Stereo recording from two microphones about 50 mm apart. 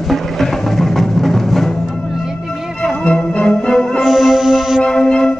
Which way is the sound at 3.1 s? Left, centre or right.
Left.